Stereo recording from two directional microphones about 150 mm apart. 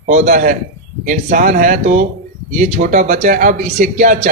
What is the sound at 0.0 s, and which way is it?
A man's voice, 55° right (ahead or behind).